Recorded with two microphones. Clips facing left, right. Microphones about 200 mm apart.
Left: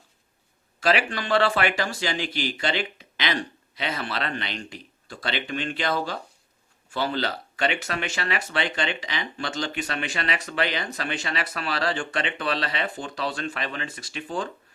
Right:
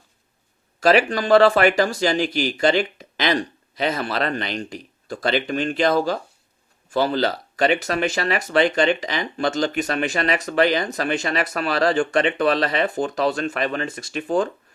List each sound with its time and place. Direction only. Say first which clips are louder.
0.8 s speech: right 7 dB; 45° right (ahead or behind)